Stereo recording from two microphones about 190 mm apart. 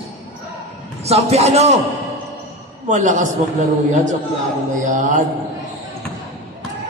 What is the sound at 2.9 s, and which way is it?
Speech, 40° right (ahead or behind).